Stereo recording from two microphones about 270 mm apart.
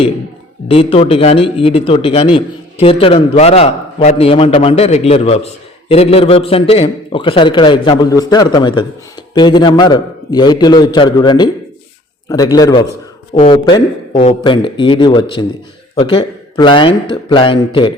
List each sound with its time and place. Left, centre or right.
0.7 s a man's voice: left